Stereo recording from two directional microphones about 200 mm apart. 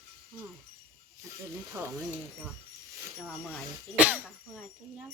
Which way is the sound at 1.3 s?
15° right (ahead or behind).